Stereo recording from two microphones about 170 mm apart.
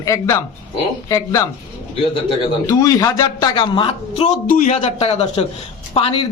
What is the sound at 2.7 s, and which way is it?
A man's voice, 20° left (ahead or behind).